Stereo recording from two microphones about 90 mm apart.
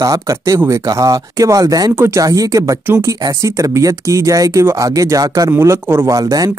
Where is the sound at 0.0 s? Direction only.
40° right (ahead or behind).